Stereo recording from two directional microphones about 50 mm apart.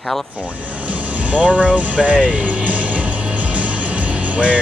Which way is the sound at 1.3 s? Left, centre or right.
Right.